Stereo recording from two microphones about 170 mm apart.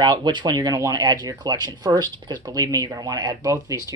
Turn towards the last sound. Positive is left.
turn(degrees=-20)  # may be behind; listen again after turning